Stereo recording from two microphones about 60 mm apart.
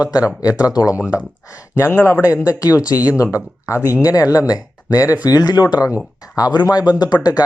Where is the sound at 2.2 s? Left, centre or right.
Left.